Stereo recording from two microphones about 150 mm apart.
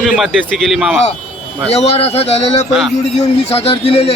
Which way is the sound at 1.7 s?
45° left (ahead or behind).